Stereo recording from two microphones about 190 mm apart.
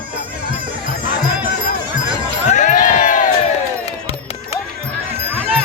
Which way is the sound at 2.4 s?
40° left (ahead or behind).